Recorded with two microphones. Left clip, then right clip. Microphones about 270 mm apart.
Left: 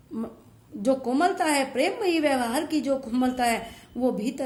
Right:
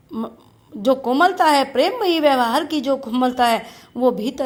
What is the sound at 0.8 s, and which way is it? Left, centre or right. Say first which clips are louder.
A woman's voice: right 7 dB; centre.